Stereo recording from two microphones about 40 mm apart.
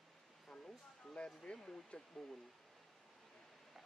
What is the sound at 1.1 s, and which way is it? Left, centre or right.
Speech, left.